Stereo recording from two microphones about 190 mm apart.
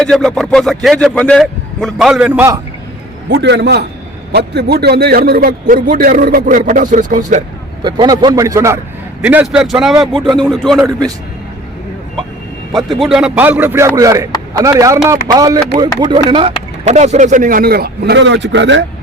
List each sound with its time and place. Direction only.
0.0 s speech: centre (ahead or behind)
3.2 s a man's voice: 65° right (ahead or behind); by 7.4 s 40° right (ahead or behind)
7.8 s a man's voice: 25° right (ahead or behind); by 9.9 s 5° right (ahead or behind)
10.1 s a man's voice: 25° right (ahead or behind)
10.4 s speech: centre (ahead or behind)
12.7 s a man's voice: centre (ahead or behind); by 18.9 s 70° right (ahead or behind)